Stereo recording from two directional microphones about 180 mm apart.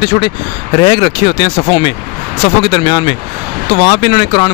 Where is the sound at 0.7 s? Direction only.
25° left (ahead or behind).